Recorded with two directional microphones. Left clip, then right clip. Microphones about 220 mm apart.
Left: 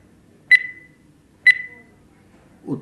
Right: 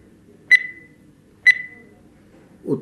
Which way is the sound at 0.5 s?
20° left (ahead or behind).